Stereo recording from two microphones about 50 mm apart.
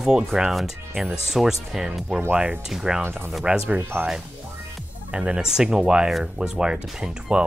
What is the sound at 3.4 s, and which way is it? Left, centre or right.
Speech, centre.